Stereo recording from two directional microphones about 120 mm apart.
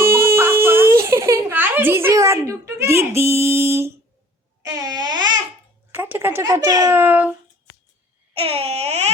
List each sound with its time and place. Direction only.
0.0 s baby cry: 20° right (ahead or behind)
4.6 s babbling: 30° right (ahead or behind)
5.9 s a sound: 15° right (ahead or behind)
6.4 s a child's voice: 25° right (ahead or behind)
7.0 s cat: 15° right (ahead or behind)
8.3 s a sound: 55° right (ahead or behind)